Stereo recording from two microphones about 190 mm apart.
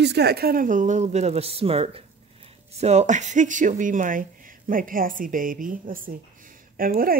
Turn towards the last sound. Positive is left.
turn(degrees=-50)  # may be behind; listen again after turning